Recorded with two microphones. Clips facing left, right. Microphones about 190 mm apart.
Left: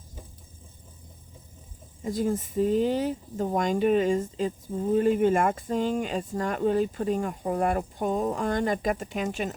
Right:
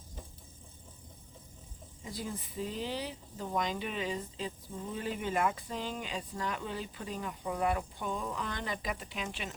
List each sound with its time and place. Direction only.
2.0 s speech: 45° left (ahead or behind)